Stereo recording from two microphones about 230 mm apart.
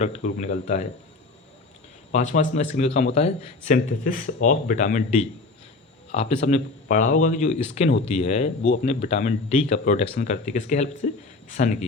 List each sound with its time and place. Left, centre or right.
0.0 s speech: left
2.1 s speech: left
6.1 s speech: left